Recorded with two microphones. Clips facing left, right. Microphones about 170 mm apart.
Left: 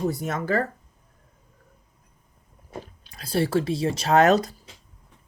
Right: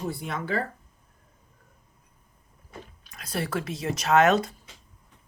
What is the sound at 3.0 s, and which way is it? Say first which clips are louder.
Speech: left 7 dB; 30° left (ahead or behind).